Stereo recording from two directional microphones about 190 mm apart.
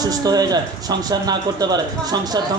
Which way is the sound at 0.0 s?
20° right (ahead or behind).